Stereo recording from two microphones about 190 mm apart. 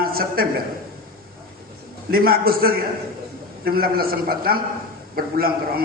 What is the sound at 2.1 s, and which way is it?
A man's voice, 50° right (ahead or behind).